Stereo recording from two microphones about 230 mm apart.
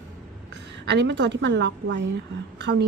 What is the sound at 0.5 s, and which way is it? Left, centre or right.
A woman's voice, right.